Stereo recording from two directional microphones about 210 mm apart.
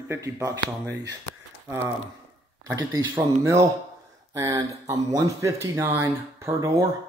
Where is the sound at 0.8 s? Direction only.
55° right (ahead or behind).